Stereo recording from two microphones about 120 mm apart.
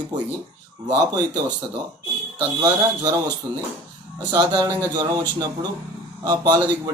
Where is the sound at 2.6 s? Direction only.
30° right (ahead or behind).